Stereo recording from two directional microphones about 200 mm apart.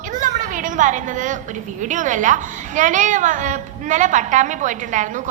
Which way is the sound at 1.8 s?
40° right (ahead or behind).